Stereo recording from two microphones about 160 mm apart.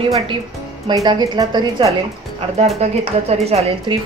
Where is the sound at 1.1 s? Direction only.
25° right (ahead or behind).